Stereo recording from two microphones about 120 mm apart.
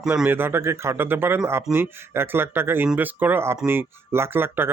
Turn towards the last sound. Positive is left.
turn(degrees=-20)  # may be behind; listen again after turning